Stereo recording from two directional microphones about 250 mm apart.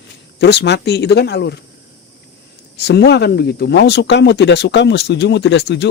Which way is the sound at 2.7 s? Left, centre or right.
Left.